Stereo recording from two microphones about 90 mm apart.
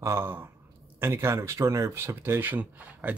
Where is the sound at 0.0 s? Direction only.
30° right (ahead or behind).